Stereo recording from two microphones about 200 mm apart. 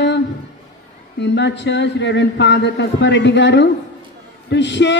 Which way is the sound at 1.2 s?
60° left (ahead or behind).